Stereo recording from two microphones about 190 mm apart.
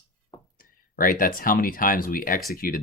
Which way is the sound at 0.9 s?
50° left (ahead or behind).